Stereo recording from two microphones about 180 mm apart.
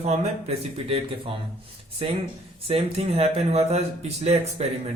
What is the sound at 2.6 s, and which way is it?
Speech, 35° right (ahead or behind).